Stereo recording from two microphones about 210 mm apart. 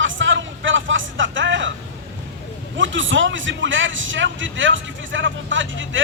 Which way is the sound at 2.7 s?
65° right (ahead or behind).